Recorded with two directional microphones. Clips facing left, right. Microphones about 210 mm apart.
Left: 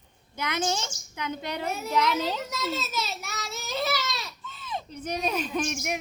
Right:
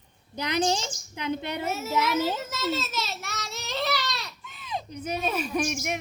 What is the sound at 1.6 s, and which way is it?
A child's voice, 5° right (ahead or behind).